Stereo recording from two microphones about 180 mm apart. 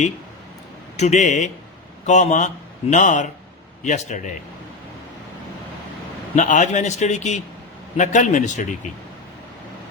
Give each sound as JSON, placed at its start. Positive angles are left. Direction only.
{"t": 0.9, "sound": "a man's voice", "side_deg": 40}
{"t": 6.3, "sound": "a man's voice", "side_deg": 40}